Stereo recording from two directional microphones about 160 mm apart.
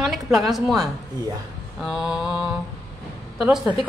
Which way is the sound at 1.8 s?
Centre (ahead or behind).